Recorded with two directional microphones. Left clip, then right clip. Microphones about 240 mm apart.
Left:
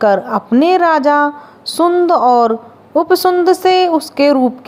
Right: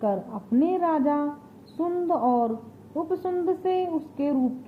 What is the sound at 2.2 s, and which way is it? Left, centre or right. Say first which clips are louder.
A woman's voice: left 14 dB; left.